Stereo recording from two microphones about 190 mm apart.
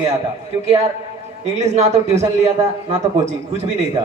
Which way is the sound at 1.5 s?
35° right (ahead or behind).